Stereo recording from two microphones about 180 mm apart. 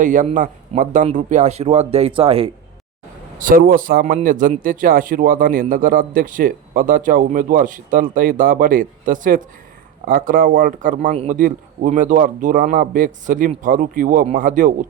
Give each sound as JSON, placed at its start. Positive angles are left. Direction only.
{"t": 0.0, "sound": "a man's voice", "side_deg": -45}
{"t": 3.3, "sound": "a man's voice", "side_deg": -50}